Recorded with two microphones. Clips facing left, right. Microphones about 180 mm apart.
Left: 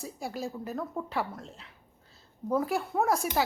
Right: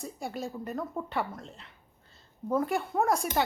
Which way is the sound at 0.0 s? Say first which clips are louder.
Even; centre (ahead or behind).